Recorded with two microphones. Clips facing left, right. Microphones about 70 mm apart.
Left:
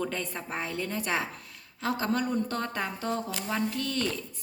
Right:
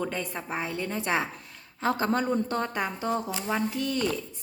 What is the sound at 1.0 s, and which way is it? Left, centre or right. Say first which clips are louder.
Speech: right 3 dB; right.